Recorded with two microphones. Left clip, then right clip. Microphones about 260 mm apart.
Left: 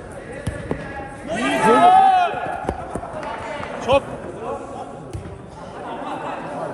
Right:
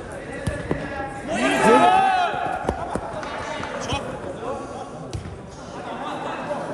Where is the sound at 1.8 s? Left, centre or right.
Centre.